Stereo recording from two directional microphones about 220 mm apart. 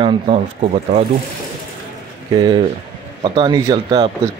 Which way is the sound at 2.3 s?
15° right (ahead or behind).